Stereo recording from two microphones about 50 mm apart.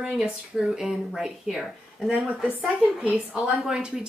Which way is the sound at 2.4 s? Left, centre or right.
Centre.